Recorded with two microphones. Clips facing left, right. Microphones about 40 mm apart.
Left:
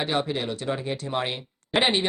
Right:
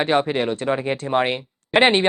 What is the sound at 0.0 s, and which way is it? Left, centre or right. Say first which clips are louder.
Speech: right 7 dB; right.